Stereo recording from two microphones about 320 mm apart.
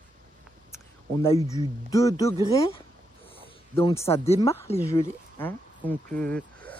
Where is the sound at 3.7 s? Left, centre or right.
Centre.